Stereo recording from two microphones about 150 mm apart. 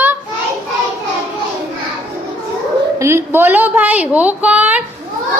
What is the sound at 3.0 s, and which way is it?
A woman's voice, 15° right (ahead or behind).